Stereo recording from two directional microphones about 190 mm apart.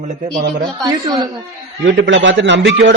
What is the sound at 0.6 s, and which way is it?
Speech, 20° right (ahead or behind).